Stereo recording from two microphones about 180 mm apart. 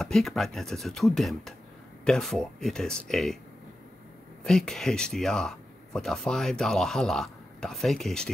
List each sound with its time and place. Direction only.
0.0 s speech: centre (ahead or behind)
4.5 s speech: centre (ahead or behind)